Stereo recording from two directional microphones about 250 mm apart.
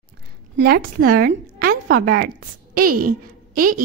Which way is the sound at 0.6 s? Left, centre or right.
Right.